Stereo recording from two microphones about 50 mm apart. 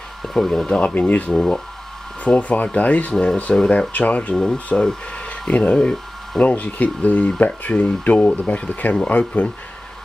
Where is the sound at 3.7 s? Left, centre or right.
Left.